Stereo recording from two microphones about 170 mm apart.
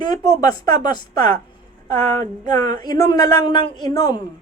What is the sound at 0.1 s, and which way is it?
A woman's voice, 20° left (ahead or behind).